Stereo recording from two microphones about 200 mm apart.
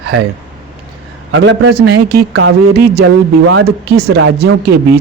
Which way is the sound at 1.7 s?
50° right (ahead or behind).